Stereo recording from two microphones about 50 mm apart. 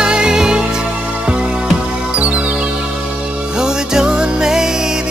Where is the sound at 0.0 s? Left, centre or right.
Centre.